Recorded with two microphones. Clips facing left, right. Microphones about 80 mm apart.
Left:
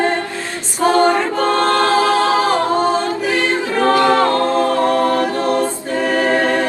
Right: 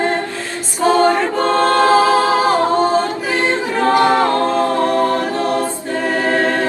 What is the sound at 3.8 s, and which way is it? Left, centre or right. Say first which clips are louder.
A capella: even; right.